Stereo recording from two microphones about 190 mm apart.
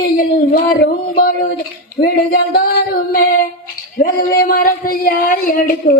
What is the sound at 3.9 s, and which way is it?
A man's voice, 50° left (ahead or behind).